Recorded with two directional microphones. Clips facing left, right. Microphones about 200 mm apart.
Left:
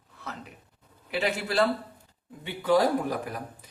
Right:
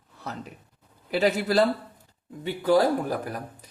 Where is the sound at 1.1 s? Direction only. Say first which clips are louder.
Right 6 dB; 40° right (ahead or behind).